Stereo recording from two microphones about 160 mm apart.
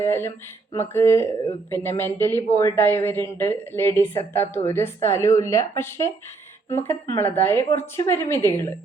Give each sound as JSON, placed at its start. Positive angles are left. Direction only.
{"t": 0.0, "sound": "speech", "side_deg": 15}